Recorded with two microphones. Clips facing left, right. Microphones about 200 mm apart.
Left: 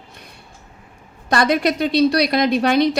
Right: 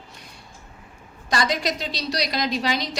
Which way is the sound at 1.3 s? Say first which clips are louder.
Left 7 dB; 60° left (ahead or behind).